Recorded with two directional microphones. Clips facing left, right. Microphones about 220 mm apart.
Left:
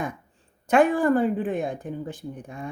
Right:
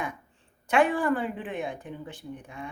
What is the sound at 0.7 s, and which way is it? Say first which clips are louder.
Speech: left 5 dB; 45° left (ahead or behind).